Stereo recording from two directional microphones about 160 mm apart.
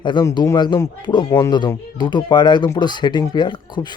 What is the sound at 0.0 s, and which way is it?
A man's voice, 30° left (ahead or behind).